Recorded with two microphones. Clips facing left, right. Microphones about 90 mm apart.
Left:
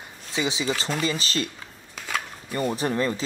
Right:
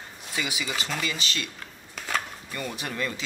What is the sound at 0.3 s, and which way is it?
Speech, 25° left (ahead or behind).